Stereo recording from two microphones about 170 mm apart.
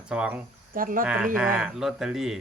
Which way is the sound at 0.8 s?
55° right (ahead or behind).